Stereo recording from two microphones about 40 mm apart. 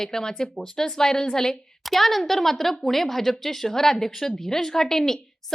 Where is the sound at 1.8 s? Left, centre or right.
Centre.